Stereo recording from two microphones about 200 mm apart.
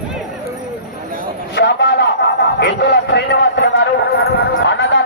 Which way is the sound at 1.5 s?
55° left (ahead or behind).